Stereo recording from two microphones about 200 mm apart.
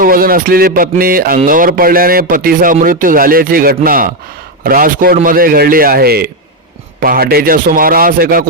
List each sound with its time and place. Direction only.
0.0 s speech: 45° right (ahead or behind)